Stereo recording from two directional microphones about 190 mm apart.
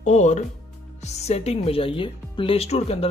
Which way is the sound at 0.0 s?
40° left (ahead or behind).